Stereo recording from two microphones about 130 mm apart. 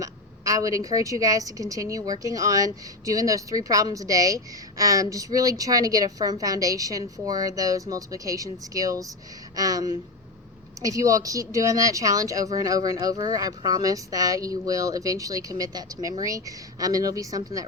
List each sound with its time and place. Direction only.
0.0 s a woman's voice: 25° right (ahead or behind)